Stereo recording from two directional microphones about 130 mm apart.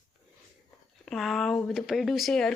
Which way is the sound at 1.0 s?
Centre (ahead or behind).